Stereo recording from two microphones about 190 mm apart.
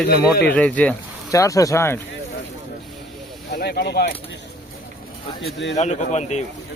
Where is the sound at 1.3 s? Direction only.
15° left (ahead or behind).